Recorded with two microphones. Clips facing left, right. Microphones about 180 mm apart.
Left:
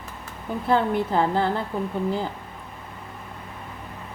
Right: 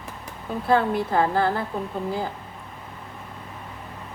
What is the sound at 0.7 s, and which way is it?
Speech, 20° left (ahead or behind).